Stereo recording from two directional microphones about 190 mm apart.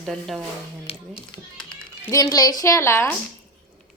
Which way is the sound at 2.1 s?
20° left (ahead or behind).